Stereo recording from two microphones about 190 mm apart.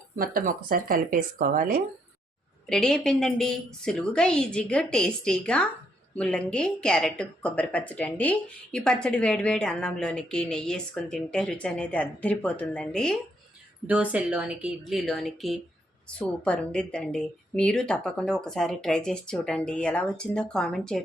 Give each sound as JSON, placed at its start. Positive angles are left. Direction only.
{"t": 0.2, "sound": "speech", "side_deg": -50}
{"t": 2.6, "sound": "a woman's voice", "side_deg": 5}
{"t": 13.8, "sound": "a woman's voice", "side_deg": -5}